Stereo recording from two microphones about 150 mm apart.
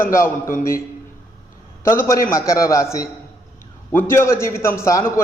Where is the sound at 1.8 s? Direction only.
15° left (ahead or behind).